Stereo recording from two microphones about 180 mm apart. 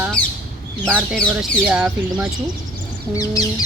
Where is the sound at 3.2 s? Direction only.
20° left (ahead or behind).